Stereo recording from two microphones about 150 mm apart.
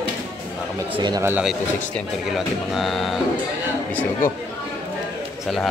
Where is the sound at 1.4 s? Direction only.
Centre (ahead or behind).